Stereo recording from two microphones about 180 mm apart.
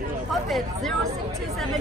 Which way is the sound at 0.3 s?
Centre (ahead or behind).